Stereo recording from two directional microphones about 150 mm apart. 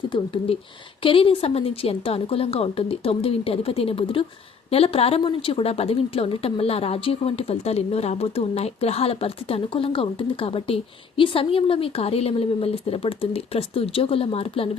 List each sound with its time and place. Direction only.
0.1 s a woman's voice: 40° left (ahead or behind)